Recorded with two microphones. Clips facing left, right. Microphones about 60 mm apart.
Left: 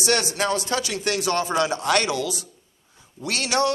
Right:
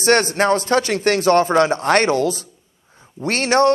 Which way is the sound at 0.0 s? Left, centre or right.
Right.